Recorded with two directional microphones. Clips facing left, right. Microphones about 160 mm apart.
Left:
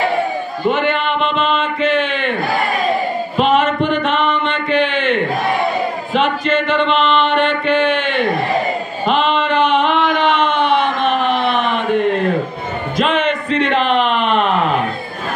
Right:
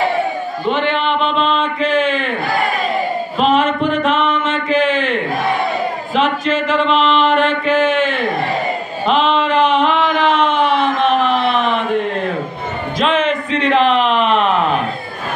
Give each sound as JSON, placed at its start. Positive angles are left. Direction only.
{"t": 0.7, "sound": "speech", "side_deg": 5}
{"t": 3.3, "sound": "music", "side_deg": 0}
{"t": 6.1, "sound": "chant", "side_deg": 0}
{"t": 9.0, "sound": "a sound", "side_deg": 0}